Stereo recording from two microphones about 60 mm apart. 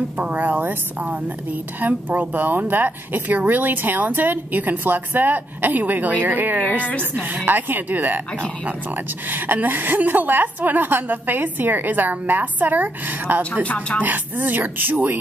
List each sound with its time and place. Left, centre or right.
0.2 s a woman's voice: right
9.3 s speech: right
13.4 s speech: centre
14.0 s speech: right